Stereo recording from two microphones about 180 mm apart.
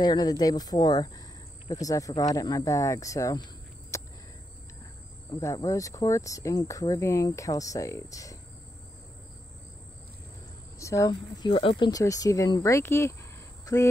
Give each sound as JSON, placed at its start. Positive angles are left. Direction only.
{"t": 0.0, "sound": "speech", "side_deg": 20}
{"t": 3.9, "sound": "a sound", "side_deg": 15}
{"t": 5.3, "sound": "speech", "side_deg": 15}
{"t": 10.8, "sound": "speech", "side_deg": 15}